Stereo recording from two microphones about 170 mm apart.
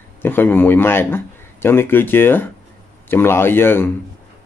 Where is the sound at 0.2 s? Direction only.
10° left (ahead or behind).